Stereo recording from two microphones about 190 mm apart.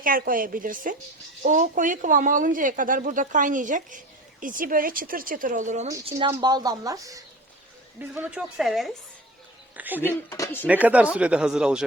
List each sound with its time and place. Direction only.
0.0 s speech: 50° right (ahead or behind)
6.1 s a woman's voice: 25° right (ahead or behind)
10.1 s speech: 15° left (ahead or behind)
10.7 s speech: 10° right (ahead or behind)